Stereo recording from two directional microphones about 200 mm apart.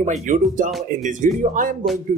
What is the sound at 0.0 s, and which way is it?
Speech, 40° right (ahead or behind).